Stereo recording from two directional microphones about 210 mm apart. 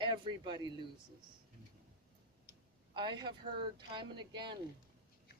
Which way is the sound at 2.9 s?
20° right (ahead or behind).